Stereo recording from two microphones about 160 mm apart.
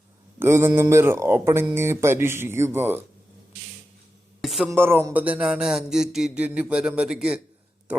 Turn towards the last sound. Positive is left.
turn(degrees=-5)  # may be behind; listen again after turning